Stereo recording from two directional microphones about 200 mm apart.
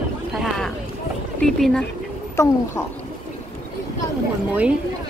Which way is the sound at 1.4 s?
5° left (ahead or behind).